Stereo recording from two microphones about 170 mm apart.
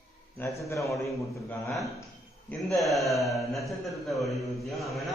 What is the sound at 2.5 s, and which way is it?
A man's voice, 5° left (ahead or behind).